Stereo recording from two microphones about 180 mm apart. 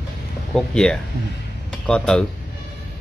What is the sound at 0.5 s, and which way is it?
A man's voice, 5° left (ahead or behind).